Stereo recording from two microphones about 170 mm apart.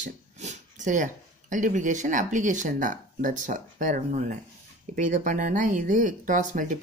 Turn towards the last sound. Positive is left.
turn(degrees=-50)  # may be behind; listen again after turning